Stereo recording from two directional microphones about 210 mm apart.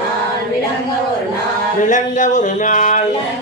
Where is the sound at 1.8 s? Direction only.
35° left (ahead or behind).